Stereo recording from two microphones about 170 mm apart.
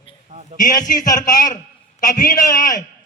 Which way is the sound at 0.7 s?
50° left (ahead or behind).